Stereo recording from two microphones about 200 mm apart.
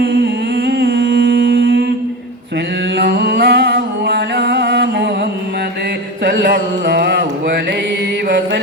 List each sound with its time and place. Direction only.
0.0 s humming: 55° right (ahead or behind)
3.0 s music: 55° right (ahead or behind)
6.2 s a sound: 55° right (ahead or behind)